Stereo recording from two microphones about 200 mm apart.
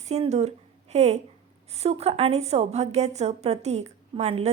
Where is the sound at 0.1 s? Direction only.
35° right (ahead or behind).